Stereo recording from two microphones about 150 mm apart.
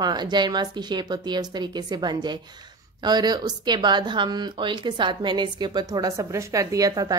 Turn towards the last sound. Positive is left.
turn(degrees=-25)  # may be behind; listen again after turning